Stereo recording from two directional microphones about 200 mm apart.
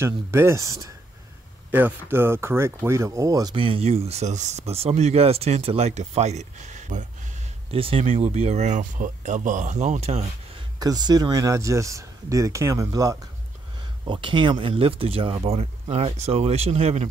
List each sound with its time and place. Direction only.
0.0 s speech: 10° right (ahead or behind); by 10.6 s 30° right (ahead or behind)
10.8 s speech: 20° right (ahead or behind)